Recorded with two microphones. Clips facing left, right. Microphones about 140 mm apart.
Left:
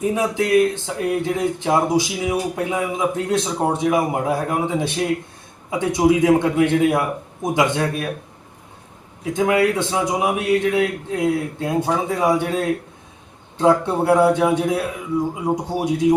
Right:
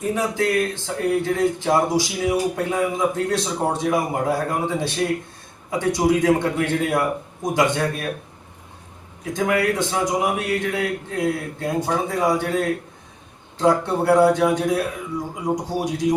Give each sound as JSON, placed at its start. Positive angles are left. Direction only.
{"t": 0.0, "sound": "speech", "side_deg": 20}
{"t": 9.4, "sound": "speech", "side_deg": 20}